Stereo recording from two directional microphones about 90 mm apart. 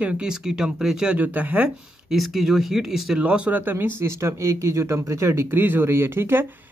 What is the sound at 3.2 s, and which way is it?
Speech, 15° right (ahead or behind).